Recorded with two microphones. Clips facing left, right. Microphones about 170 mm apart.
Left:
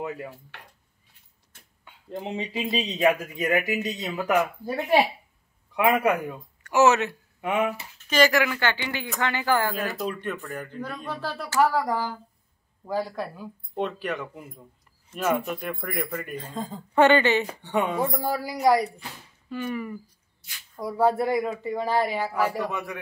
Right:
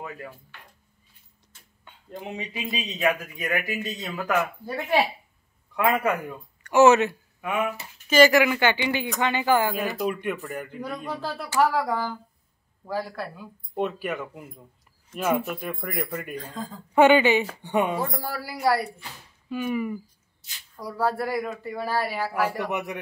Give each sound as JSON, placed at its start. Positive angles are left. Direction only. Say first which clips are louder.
{"t": 0.5, "sound": "dishes", "louder": "left 2 dB", "side_deg": 75}
{"t": 2.0, "sound": "speech", "louder": "left 3 dB", "side_deg": 25}
{"t": 5.8, "sound": "a man's voice", "louder": "left 2 dB", "side_deg": 15}
{"t": 6.6, "sound": "speech", "louder": "right 3 dB", "side_deg": 5}
{"t": 8.5, "sound": "speech", "louder": "right 4 dB", "side_deg": -15}
{"t": 11.9, "sound": "a man's voice", "louder": "even", "side_deg": 5}
{"t": 12.8, "sound": "a man's voice", "louder": "left 2 dB", "side_deg": 15}
{"t": 13.7, "sound": "speech", "louder": "right 1 dB", "side_deg": -10}
{"t": 16.6, "sound": "speech", "louder": "left 4 dB", "side_deg": 25}
{"t": 16.9, "sound": "speech", "louder": "right 2 dB", "side_deg": -10}
{"t": 18.2, "sound": "a man's voice", "louder": "left 3 dB", "side_deg": 15}
{"t": 19.5, "sound": "speech", "louder": "right 3 dB", "side_deg": -10}
{"t": 20.7, "sound": "speech", "louder": "left 4 dB", "side_deg": 20}
{"t": 22.7, "sound": "a man's voice", "louder": "right 3 dB", "side_deg": -20}